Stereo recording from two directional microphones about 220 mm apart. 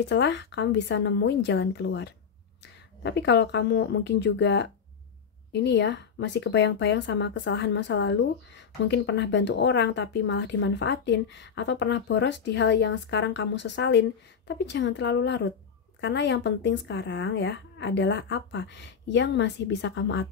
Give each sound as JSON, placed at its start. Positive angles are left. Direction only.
{"t": 0.1, "sound": "speech", "side_deg": 55}